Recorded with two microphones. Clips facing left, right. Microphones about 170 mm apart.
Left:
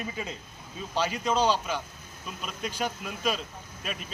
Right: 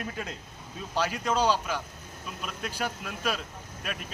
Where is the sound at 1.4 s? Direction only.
10° right (ahead or behind).